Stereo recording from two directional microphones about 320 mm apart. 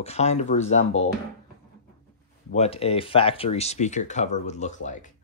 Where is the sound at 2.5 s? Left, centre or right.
Centre.